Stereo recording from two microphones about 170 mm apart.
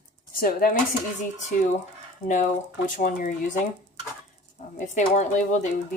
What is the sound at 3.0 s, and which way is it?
Speech, 55° left (ahead or behind).